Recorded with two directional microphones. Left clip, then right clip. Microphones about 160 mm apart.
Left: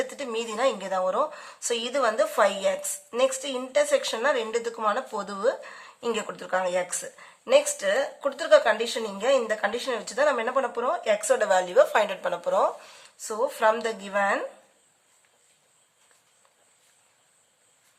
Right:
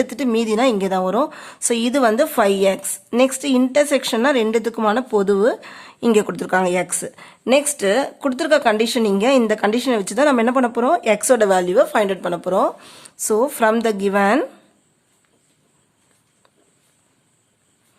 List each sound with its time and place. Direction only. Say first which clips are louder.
0.0 s a woman's voice: right 10 dB; 40° right (ahead or behind)